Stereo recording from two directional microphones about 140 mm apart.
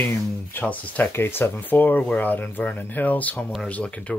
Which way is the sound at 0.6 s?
10° left (ahead or behind).